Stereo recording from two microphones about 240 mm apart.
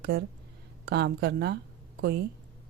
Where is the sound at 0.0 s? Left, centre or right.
Right.